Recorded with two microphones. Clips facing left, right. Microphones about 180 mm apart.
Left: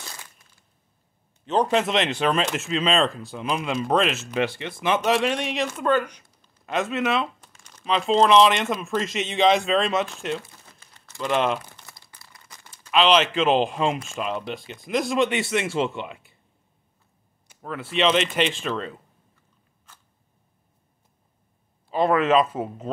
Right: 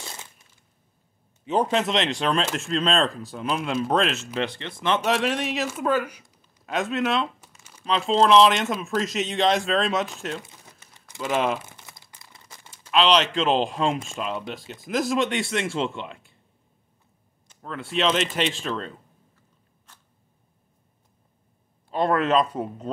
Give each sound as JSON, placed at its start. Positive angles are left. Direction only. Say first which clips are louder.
{"t": 0.0, "sound": "a sound", "louder": "right 2 dB", "side_deg": -25}
{"t": 1.4, "sound": "a man's voice", "louder": "left 1 dB", "side_deg": -10}
{"t": 1.7, "sound": "speech", "louder": "left 1 dB", "side_deg": 0}
{"t": 7.4, "sound": "crumpling", "louder": "even", "side_deg": -10}
{"t": 7.9, "sound": "speech", "louder": "even", "side_deg": 5}
{"t": 11.1, "sound": "crumpling", "louder": "left 1 dB", "side_deg": -5}
{"t": 12.9, "sound": "speech", "louder": "left 1 dB", "side_deg": 0}
{"t": 17.5, "sound": "speech", "louder": "left 1 dB", "side_deg": 5}
{"t": 21.9, "sound": "speech", "louder": "left 2 dB", "side_deg": 0}